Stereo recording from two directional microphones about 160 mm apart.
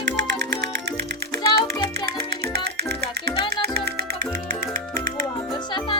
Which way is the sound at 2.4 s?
85° right.